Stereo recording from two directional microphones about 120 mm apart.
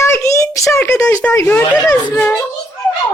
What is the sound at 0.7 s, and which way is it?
Speech, 25° left (ahead or behind).